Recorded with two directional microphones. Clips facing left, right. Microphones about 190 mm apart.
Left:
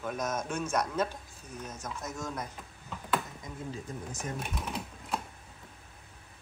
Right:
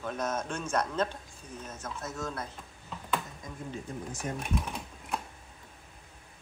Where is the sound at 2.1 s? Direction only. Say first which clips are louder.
Right 1 dB; 15° left (ahead or behind).